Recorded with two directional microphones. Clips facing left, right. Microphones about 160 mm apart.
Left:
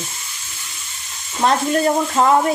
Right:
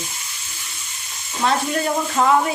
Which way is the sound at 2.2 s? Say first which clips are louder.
Left 1 dB; 35° left (ahead or behind).